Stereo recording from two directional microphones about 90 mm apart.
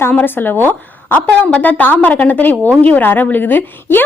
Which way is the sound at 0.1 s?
20° left (ahead or behind).